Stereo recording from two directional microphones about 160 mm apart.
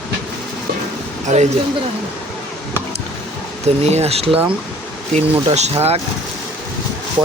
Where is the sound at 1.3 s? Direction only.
45° right (ahead or behind).